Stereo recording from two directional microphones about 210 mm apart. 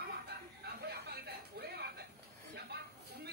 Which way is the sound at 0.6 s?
50° right (ahead or behind).